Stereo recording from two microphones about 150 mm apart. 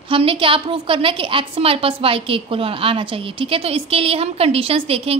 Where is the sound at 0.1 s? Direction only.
35° right (ahead or behind).